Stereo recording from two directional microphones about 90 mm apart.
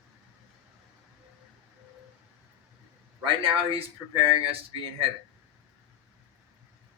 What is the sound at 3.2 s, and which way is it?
Speech, 85° right.